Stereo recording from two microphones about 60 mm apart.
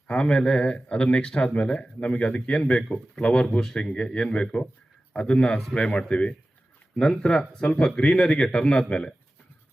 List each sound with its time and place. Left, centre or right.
0.1 s speech: centre
8.1 s speech: centre